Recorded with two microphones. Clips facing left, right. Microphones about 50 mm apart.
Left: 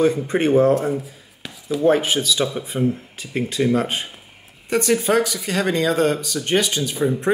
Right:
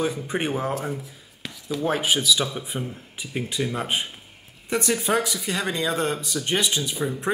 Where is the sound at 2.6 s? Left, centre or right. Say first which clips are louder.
Left 10 dB; centre.